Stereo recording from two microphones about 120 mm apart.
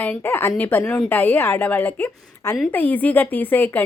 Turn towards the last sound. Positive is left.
turn(degrees=15)  # may be behind; listen again after turning